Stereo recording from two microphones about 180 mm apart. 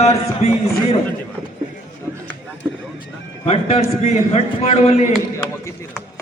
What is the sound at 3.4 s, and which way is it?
A man's voice, 35° left (ahead or behind).